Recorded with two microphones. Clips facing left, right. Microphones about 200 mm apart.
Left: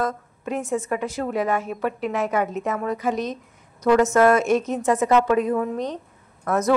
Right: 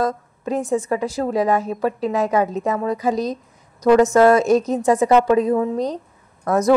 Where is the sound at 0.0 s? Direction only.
35° right (ahead or behind).